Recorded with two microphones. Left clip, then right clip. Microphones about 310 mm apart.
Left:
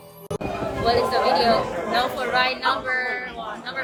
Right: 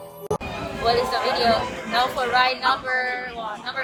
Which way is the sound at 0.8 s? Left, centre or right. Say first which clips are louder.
Left 1 dB; centre.